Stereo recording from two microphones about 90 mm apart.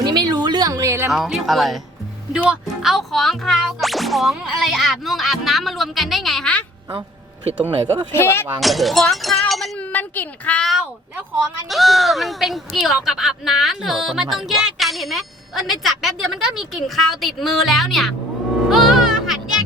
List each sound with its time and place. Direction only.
0.0 s a sound: 50° right (ahead or behind); by 1.1 s 35° right (ahead or behind)
1.1 s speech: centre (ahead or behind)
2.9 s speech: centre (ahead or behind)
8.1 s speech: 30° left (ahead or behind)
8.6 s speech: centre (ahead or behind)
9.7 s speech: 20° left (ahead or behind)
10.6 s speech: centre (ahead or behind)
18.7 s music: 5° right (ahead or behind)